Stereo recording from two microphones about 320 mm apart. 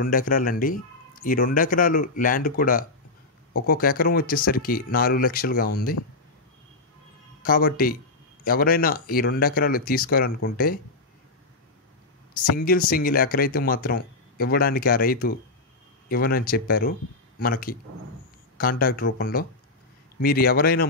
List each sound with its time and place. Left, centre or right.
0.0 s speech: left
7.4 s speech: left
12.5 s speech: left